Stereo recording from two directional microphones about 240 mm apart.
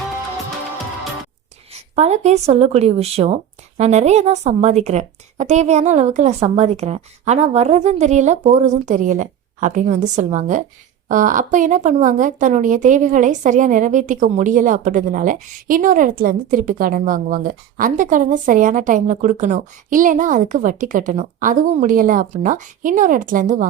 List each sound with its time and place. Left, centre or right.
1.7 s a woman's voice: right